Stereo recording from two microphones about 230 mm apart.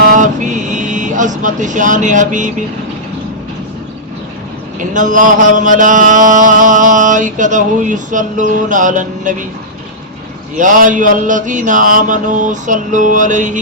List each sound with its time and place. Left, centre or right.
0.0 s vehicle: right
4.8 s mantra: right
10.6 s mantra: right